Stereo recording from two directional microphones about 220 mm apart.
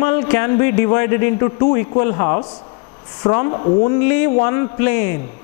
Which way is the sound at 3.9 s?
10° left (ahead or behind).